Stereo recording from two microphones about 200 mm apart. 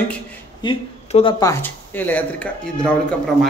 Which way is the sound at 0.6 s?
25° left (ahead or behind).